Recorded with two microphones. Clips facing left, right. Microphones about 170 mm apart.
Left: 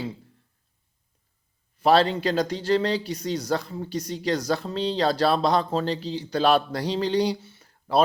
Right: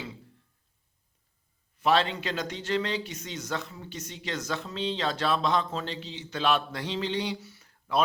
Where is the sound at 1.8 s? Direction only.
35° left (ahead or behind).